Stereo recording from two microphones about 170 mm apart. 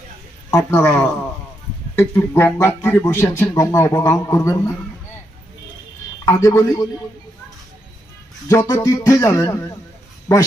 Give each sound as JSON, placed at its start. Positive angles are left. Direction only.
{"t": 0.5, "sound": "speech", "side_deg": 15}
{"t": 6.2, "sound": "speech", "side_deg": 20}
{"t": 8.4, "sound": "speech", "side_deg": 20}